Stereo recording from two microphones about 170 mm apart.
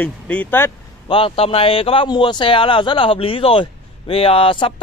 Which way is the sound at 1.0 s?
30° left (ahead or behind).